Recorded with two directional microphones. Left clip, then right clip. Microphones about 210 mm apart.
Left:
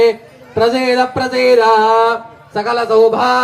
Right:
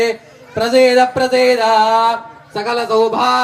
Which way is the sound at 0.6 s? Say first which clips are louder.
Right 2 dB; 50° right (ahead or behind).